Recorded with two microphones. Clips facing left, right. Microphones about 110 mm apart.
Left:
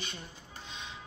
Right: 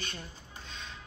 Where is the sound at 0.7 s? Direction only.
20° left (ahead or behind).